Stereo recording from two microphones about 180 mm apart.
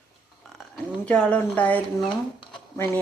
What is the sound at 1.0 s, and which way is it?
Speech, 5° left (ahead or behind).